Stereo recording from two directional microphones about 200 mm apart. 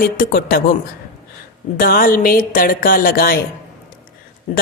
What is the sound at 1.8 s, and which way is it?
Speech, 45° left (ahead or behind).